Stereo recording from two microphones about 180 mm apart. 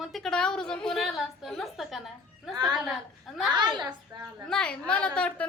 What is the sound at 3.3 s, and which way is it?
Speech, centre (ahead or behind).